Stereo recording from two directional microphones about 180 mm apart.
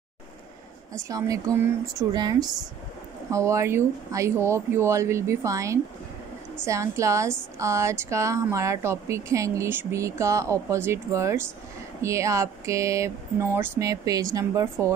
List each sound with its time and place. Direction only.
1.0 s a woman's voice: 20° right (ahead or behind)